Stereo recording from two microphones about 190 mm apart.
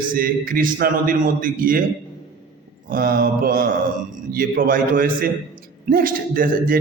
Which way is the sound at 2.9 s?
50° right (ahead or behind).